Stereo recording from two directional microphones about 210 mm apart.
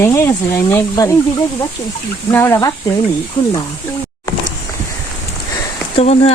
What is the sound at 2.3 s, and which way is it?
Speech, 10° left (ahead or behind).